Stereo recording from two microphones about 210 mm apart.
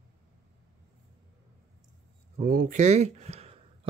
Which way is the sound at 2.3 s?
40° right (ahead or behind).